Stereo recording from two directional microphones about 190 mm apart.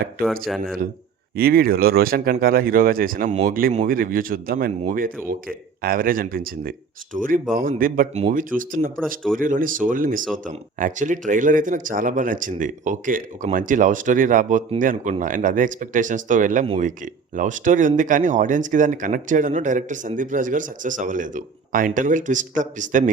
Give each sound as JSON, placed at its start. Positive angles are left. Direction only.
{"t": 0.2, "sound": "a man's voice", "side_deg": -50}
{"t": 1.4, "sound": "a man's voice", "side_deg": -50}
{"t": 16.6, "sound": "speech", "side_deg": -30}
{"t": 17.3, "sound": "a man's voice", "side_deg": -40}